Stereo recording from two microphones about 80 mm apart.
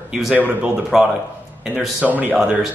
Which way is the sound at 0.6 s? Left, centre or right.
Centre.